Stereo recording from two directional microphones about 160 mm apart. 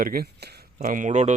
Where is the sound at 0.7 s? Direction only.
55° right (ahead or behind).